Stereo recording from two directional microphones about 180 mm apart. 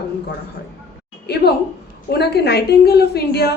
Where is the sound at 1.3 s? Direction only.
65° left (ahead or behind).